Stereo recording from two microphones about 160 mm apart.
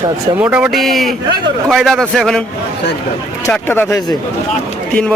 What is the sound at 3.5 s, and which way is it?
Speech, 15° left (ahead or behind).